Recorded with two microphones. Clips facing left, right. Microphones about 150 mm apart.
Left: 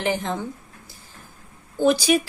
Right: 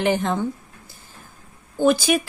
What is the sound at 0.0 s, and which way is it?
Speech, 60° right (ahead or behind).